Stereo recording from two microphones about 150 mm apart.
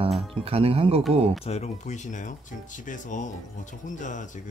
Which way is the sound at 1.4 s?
45° left (ahead or behind).